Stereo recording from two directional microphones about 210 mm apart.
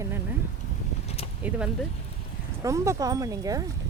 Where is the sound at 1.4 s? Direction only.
5° right (ahead or behind).